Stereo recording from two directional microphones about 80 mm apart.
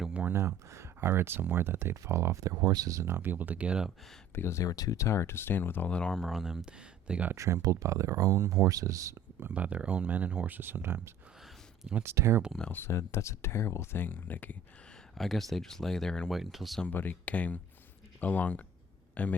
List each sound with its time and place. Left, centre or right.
0.0 s a sound: centre
0.3 s speech: right
3.1 s speech: right
4.4 s speech: left; by 6.3 s centre
6.3 s speech: centre
7.3 s speech: right
9.5 s speech: centre; by 12.4 s right
12.7 s speech: left
15.2 s speech: centre
16.3 s speech: centre
16.8 s a man's voice: left